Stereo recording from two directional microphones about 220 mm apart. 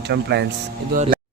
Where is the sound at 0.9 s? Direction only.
35° right (ahead or behind).